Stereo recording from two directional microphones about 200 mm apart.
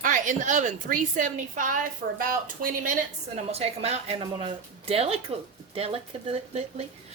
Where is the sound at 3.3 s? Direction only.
30° right (ahead or behind).